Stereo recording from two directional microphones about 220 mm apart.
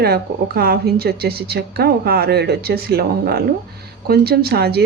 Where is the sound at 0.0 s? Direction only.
45° right (ahead or behind).